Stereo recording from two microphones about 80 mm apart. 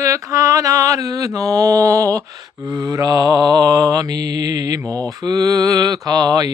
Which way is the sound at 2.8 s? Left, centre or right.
Right.